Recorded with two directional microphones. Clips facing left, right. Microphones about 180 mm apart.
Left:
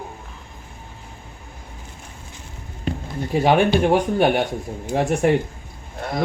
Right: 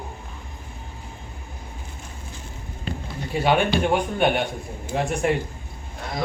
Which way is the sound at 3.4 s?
40° left (ahead or behind).